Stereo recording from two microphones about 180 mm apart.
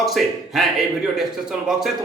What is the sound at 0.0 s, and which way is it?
Speech, centre (ahead or behind).